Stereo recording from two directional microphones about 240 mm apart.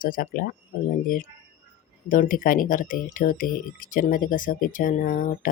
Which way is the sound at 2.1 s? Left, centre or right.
Left.